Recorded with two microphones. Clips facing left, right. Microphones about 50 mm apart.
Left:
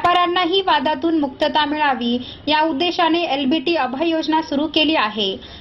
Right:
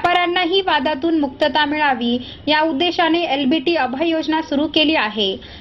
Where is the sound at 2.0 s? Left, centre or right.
Right.